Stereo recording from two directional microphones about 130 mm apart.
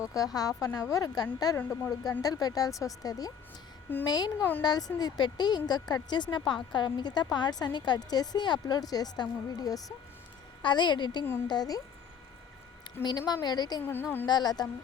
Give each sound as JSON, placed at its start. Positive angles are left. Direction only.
{"t": 0.0, "sound": "a woman's voice", "side_deg": 25}
{"t": 13.0, "sound": "a woman's voice", "side_deg": 35}
{"t": 13.8, "sound": "speech", "side_deg": 15}
{"t": 14.3, "sound": "a woman's voice", "side_deg": 30}